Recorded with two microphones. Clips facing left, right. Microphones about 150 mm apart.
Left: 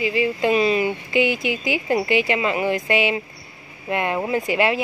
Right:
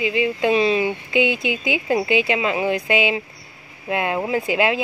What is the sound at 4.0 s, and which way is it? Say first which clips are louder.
Speech: even; 10° right (ahead or behind).